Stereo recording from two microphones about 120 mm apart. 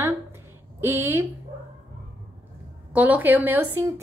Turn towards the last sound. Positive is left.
turn(degrees=-15)  # may be behind; listen again after turning